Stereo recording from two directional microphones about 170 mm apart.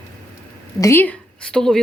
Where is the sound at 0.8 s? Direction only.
15° left (ahead or behind).